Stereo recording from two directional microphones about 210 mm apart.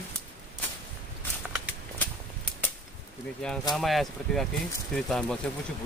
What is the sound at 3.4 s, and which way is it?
Speech, 5° left (ahead or behind).